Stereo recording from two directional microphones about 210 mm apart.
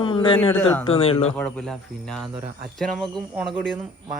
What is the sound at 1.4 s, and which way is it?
Speech, 5° left (ahead or behind).